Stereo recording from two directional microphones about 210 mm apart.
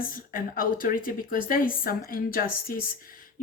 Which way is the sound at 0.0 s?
40° left (ahead or behind).